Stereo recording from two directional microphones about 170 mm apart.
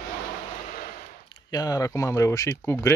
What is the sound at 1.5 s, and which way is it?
Speech, 20° left (ahead or behind).